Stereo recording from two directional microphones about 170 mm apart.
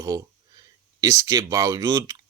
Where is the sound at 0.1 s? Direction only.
20° right (ahead or behind).